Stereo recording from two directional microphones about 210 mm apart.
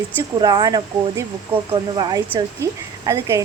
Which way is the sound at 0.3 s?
20° right (ahead or behind).